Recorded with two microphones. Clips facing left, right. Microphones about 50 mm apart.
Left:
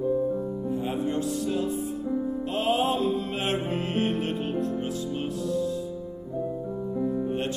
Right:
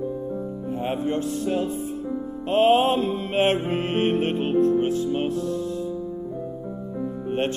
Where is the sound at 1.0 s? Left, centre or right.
Right.